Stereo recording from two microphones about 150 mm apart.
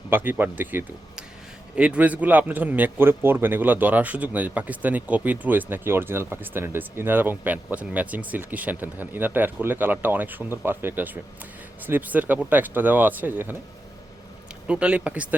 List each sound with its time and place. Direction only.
0.1 s a man's voice: 15° right (ahead or behind)
14.7 s a man's voice: 10° right (ahead or behind)